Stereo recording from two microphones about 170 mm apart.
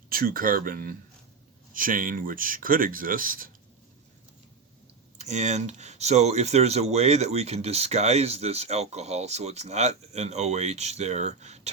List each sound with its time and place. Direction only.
0.1 s speech: 60° right (ahead or behind)
5.1 s speech: 40° right (ahead or behind)